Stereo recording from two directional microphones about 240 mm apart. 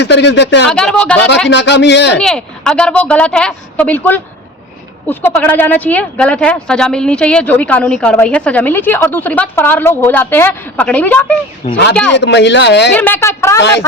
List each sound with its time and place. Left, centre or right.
0.0 s speech: left
0.7 s a woman's voice: centre
1.5 s speech: left
2.1 s a woman's voice: centre
11.6 s speech: left
12.1 s speech: left
12.9 s speech: centre